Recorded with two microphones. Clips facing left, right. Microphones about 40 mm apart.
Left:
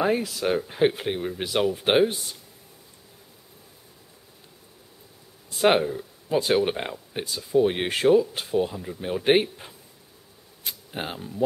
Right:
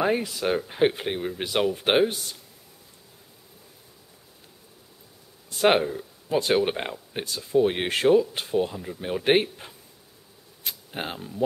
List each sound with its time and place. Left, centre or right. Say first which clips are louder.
0.0 s speech: left 1 dB; centre
5.5 s speech: even; centre